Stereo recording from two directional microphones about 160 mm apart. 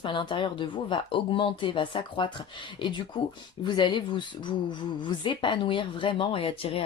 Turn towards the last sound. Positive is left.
turn(degrees=35)  # may be behind; listen again after turning